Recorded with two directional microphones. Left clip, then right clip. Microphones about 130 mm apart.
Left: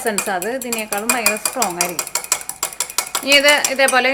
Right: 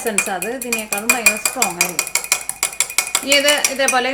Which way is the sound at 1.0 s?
Centre (ahead or behind).